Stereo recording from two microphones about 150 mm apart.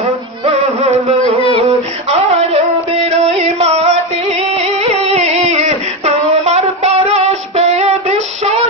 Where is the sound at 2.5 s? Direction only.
40° right (ahead or behind).